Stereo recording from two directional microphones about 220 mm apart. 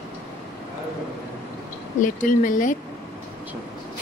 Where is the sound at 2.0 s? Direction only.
35° left (ahead or behind).